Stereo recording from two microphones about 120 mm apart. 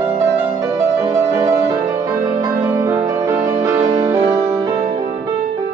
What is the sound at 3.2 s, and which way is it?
Music, 25° right (ahead or behind).